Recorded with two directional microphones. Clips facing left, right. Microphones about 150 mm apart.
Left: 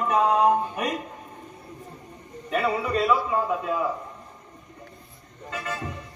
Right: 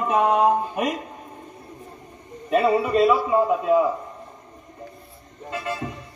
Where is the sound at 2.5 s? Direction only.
20° right (ahead or behind).